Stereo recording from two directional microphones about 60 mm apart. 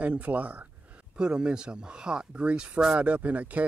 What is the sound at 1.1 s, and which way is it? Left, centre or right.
Speech, centre.